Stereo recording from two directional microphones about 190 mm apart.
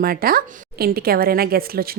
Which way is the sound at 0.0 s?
50° right (ahead or behind).